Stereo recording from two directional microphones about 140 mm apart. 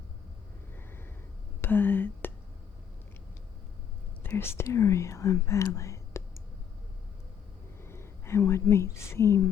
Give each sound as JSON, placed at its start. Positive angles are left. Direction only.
{"t": 1.6, "sound": "speech", "side_deg": 15}
{"t": 4.2, "sound": "speech", "side_deg": 15}
{"t": 7.8, "sound": "speech", "side_deg": 20}